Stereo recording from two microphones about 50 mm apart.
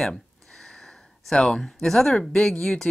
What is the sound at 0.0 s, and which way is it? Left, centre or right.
Speech, centre.